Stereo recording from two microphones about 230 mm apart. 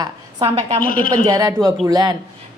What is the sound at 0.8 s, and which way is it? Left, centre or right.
Speech, left.